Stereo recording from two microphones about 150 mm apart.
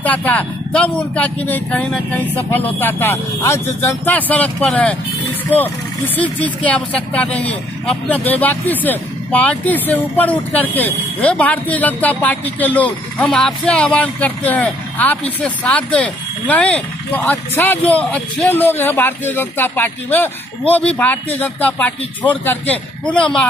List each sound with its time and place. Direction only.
0.0 s speech: 10° left (ahead or behind)
6.1 s speech: 10° left (ahead or behind)